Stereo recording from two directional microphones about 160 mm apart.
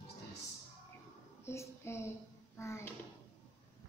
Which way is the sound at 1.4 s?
15° left (ahead or behind).